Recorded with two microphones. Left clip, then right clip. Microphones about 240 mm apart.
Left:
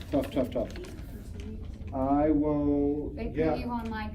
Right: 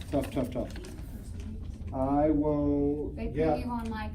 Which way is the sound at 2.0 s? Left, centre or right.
Centre.